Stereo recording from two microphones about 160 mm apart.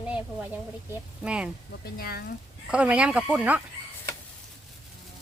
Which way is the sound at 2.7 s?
5° right (ahead or behind).